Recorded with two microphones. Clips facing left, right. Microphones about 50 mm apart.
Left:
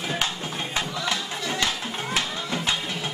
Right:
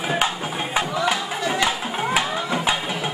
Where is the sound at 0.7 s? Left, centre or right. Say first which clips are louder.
Right 7 dB; centre.